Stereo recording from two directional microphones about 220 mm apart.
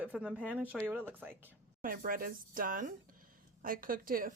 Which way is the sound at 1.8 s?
40° right (ahead or behind).